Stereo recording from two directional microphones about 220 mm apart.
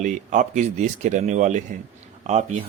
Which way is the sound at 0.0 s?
35° right (ahead or behind).